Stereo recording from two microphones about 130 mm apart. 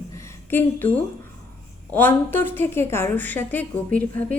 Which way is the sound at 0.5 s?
15° left (ahead or behind).